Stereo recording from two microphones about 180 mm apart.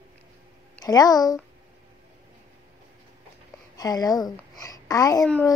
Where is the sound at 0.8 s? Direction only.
20° left (ahead or behind).